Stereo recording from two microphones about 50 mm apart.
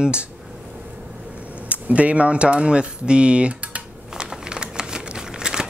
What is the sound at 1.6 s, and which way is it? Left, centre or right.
Speech, right.